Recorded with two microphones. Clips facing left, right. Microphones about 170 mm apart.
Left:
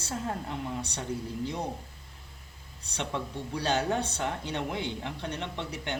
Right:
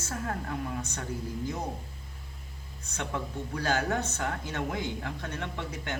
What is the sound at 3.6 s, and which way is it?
Speech, 15° left (ahead or behind).